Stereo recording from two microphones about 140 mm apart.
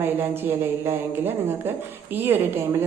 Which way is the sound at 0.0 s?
15° right (ahead or behind).